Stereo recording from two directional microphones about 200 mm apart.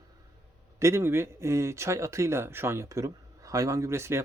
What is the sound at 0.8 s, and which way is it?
Speech, 15° right (ahead or behind).